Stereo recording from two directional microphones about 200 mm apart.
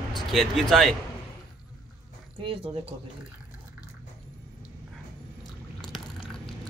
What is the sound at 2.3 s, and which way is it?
Speech, 25° right (ahead or behind).